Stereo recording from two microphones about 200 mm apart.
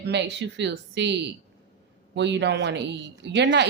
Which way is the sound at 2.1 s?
60° right (ahead or behind).